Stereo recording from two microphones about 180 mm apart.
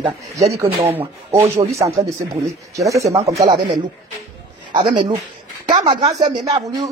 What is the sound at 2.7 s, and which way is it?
Speech, 15° right (ahead or behind).